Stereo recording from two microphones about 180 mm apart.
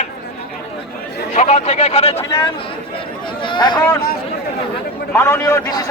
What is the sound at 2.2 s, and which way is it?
Speech, 20° left (ahead or behind).